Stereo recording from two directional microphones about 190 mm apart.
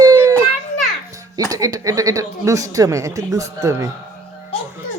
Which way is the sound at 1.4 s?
20° right (ahead or behind).